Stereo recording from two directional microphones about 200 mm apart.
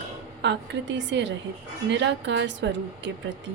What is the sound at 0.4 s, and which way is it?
Speech, 65° right (ahead or behind).